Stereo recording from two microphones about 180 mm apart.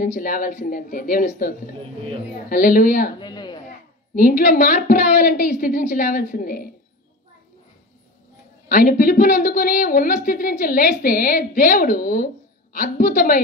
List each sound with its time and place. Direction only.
0.0 s a woman's voice: 50° left (ahead or behind)
2.5 s a woman's voice: 50° left (ahead or behind)
3.2 s a sound: 25° left (ahead or behind)
4.1 s a woman's voice: 50° left (ahead or behind)
8.6 s a woman's voice: 50° left (ahead or behind)